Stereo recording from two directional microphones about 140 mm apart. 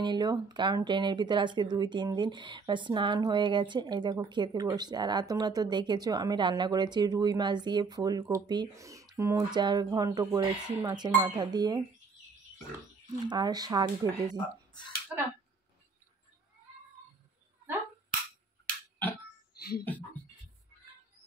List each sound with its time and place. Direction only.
0.0 s speech: 30° right (ahead or behind)
13.3 s speech: 30° right (ahead or behind)
19.8 s a sound: 10° left (ahead or behind)